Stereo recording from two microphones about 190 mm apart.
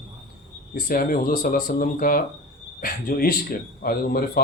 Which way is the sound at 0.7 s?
50° left (ahead or behind).